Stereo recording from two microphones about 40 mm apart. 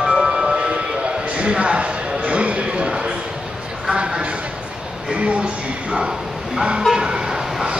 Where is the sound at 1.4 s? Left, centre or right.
Right.